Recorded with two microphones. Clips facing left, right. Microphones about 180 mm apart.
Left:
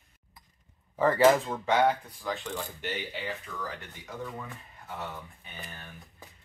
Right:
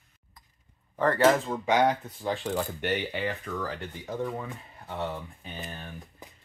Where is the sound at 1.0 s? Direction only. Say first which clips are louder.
Left 1 dB; centre (ahead or behind).